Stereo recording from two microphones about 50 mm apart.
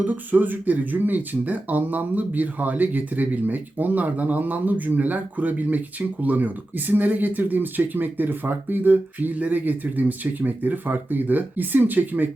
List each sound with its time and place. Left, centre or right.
0.0 s speech: right